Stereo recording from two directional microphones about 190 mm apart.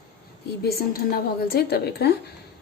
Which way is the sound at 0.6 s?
55° left (ahead or behind).